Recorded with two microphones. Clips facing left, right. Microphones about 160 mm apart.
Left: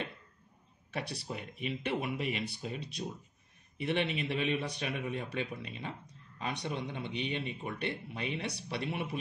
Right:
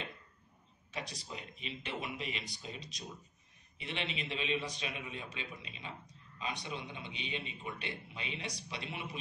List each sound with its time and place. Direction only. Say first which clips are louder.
0.9 s speech: left 5 dB; 60° left (ahead or behind)